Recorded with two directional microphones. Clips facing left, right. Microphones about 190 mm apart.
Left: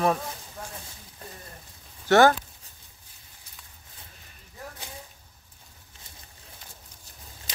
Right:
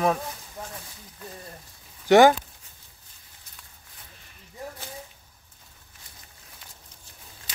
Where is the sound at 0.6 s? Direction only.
20° right (ahead or behind).